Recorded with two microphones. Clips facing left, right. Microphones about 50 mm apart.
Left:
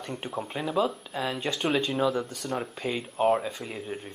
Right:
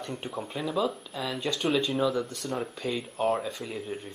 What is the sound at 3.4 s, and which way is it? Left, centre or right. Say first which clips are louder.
Speech: even; centre.